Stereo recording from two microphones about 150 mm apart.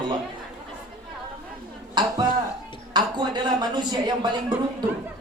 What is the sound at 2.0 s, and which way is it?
Speech, 30° right (ahead or behind).